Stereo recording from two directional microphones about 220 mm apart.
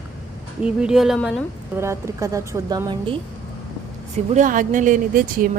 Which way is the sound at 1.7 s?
10° right (ahead or behind).